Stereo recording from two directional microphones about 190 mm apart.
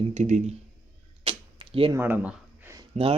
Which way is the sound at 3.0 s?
30° right (ahead or behind).